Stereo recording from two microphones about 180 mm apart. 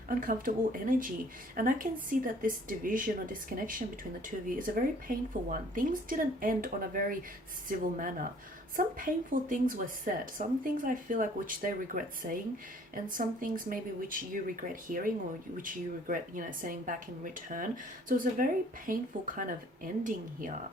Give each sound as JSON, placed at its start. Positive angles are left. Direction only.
{"t": 0.1, "sound": "a woman's voice", "side_deg": -50}